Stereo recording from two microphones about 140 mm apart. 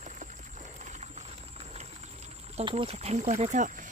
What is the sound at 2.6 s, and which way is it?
Speech, 35° right (ahead or behind).